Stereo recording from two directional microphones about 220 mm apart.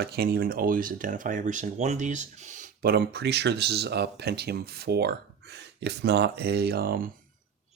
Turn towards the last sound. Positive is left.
turn(degrees=-45)  # may be behind; listen again after turning